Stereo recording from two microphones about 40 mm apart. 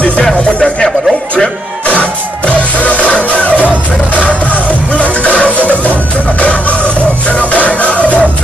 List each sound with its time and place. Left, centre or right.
0.4 s music: left
1.9 s music: left